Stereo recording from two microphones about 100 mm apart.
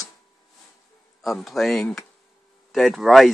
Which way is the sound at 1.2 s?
Centre (ahead or behind).